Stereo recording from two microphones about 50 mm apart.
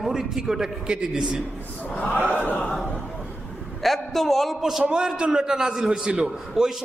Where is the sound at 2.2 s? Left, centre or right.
Right.